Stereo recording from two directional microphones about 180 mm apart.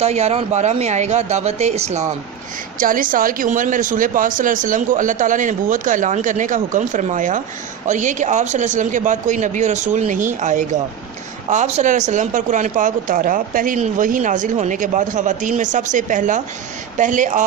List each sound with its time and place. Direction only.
0.0 s speech: 35° right (ahead or behind)
2.7 s speech: 50° right (ahead or behind)